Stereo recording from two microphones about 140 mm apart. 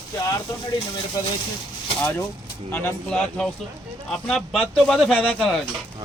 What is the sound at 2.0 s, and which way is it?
A man's voice, 15° left (ahead or behind).